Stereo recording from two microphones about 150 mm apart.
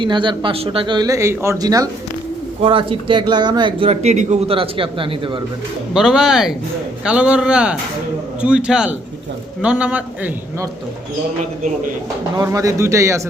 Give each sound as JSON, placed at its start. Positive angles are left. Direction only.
{"t": 0.0, "sound": "speech", "side_deg": -30}
{"t": 2.6, "sound": "a man's voice", "side_deg": -35}
{"t": 3.8, "sound": "a man's voice", "side_deg": -50}
{"t": 5.9, "sound": "a man's voice", "side_deg": -5}
{"t": 12.4, "sound": "speech", "side_deg": -20}